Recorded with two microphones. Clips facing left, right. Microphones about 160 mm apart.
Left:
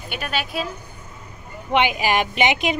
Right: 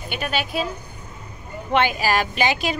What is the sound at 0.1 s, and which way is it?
Speech, centre (ahead or behind).